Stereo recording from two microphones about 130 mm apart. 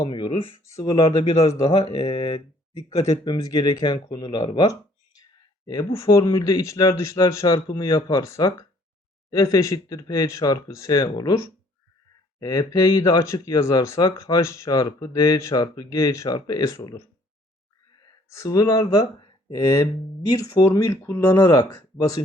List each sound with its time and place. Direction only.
0.0 s speech: 45° left (ahead or behind)
0.6 s speech: 25° left (ahead or behind)
1.2 s speech: 45° left (ahead or behind)
5.9 s speech: 20° left (ahead or behind)
18.3 s speech: 25° left (ahead or behind)